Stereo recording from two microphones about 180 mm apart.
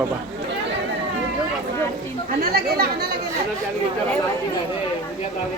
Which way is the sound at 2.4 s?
60° right (ahead or behind).